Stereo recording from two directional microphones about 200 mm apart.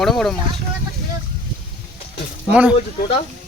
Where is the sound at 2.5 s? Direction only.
5° right (ahead or behind).